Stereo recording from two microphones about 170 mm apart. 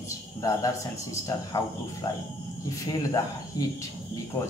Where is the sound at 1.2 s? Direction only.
20° left (ahead or behind).